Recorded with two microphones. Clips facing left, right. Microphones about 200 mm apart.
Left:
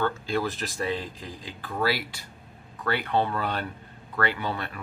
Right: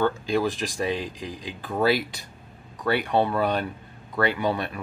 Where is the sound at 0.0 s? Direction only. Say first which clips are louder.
Right 4 dB; 15° right (ahead or behind).